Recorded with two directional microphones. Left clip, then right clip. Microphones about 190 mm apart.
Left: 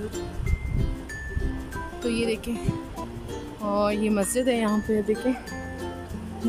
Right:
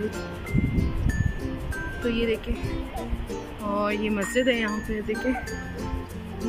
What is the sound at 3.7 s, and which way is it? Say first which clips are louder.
Speech: left 2 dB; 15° left (ahead or behind).